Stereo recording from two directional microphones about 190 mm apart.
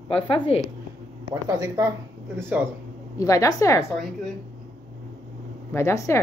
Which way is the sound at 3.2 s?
15° left (ahead or behind).